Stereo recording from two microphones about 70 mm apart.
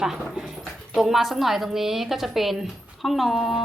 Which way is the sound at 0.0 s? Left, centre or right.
Centre.